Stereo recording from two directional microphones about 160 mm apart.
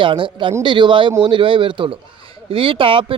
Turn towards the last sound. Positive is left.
turn(degrees=-35)  # may be behind; listen again after turning